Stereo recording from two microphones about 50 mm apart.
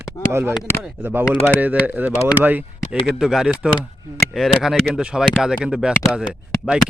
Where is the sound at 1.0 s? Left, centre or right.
Right.